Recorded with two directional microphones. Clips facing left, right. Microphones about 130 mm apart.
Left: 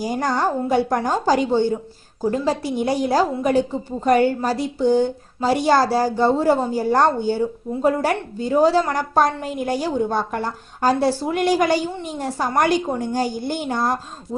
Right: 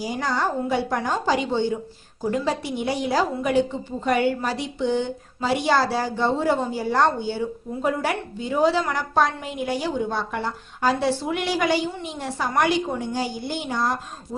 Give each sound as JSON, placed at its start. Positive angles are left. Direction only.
{"t": 0.0, "sound": "a woman's voice", "side_deg": 50}